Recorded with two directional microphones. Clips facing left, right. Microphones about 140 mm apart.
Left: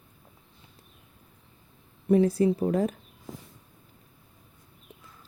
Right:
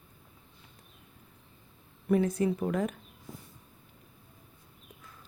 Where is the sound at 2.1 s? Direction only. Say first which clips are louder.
Left 5 dB; 30° left (ahead or behind).